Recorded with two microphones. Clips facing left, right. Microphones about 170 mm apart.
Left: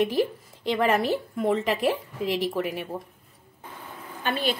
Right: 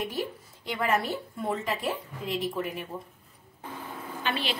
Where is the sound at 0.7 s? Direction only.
90° left; by 2.9 s 75° left (ahead or behind).